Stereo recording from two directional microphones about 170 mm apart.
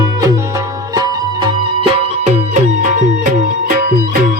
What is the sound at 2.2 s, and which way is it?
Music, 45° right (ahead or behind).